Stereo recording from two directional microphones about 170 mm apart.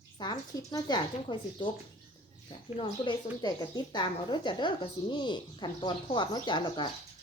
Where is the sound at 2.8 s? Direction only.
25° left (ahead or behind).